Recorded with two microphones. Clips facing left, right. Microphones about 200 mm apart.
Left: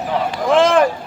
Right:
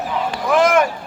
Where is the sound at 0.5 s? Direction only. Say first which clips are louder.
Left 2 dB; 30° left (ahead or behind).